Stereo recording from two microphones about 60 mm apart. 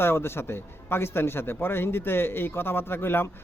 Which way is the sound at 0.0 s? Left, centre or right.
Left.